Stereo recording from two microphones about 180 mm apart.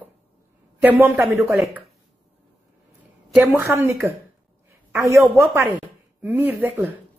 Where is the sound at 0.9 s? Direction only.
10° right (ahead or behind).